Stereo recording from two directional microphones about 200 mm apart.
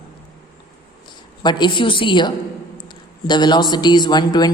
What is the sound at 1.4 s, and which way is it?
Speech, 20° left (ahead or behind).